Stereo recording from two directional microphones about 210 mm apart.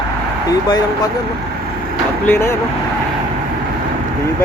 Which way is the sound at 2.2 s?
10° left (ahead or behind).